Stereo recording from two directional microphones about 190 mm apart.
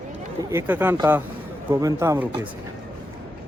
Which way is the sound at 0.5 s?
10° right (ahead or behind).